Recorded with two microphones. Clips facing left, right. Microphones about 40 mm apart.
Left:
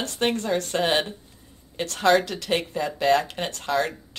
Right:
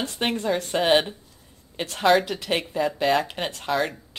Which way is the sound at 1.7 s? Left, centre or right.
Centre.